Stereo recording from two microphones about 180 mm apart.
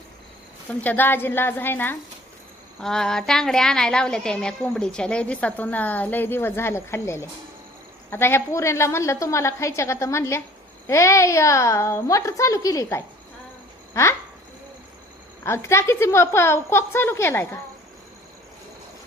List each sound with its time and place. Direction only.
0.7 s a woman's voice: 10° left (ahead or behind)
15.4 s a woman's voice: 15° left (ahead or behind)